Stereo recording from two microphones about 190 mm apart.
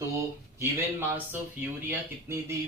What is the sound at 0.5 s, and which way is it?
Speech, 10° right (ahead or behind).